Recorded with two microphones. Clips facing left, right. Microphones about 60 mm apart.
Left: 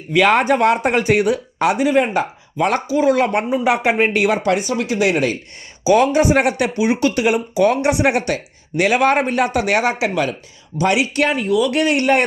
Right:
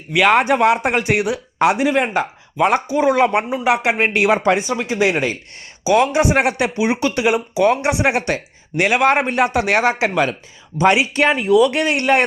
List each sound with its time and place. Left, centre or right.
0.2 s speech: centre
2.9 s speech: right; by 9.2 s centre
9.2 s speech: centre